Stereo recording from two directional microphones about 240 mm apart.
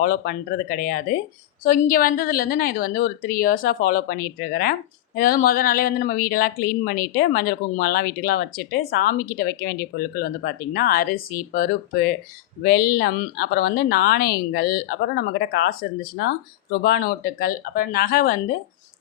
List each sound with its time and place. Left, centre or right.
0.0 s a woman's voice: left